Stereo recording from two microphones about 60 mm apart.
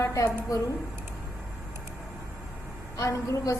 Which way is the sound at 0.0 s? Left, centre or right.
Left.